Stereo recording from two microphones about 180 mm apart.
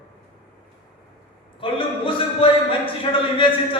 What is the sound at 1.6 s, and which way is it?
A man's voice, 30° left (ahead or behind).